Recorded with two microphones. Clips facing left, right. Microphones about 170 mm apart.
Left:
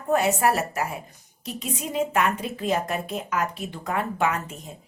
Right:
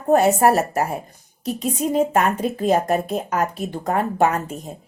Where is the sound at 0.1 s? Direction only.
40° right (ahead or behind).